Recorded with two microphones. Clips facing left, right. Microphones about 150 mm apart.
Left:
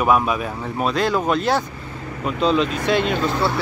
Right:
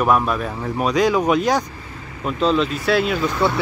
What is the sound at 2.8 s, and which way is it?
Speech, 5° right (ahead or behind).